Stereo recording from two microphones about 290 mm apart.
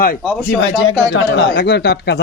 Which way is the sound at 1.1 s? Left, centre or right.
Left.